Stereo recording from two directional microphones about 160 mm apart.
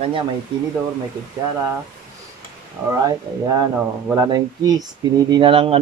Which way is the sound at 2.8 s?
25° right (ahead or behind).